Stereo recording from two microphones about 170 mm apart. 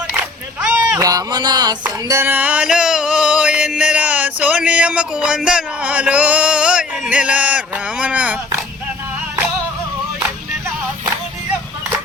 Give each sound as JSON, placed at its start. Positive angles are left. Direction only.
{"t": 1.0, "sound": "speech", "side_deg": -20}
{"t": 2.0, "sound": "music", "side_deg": -15}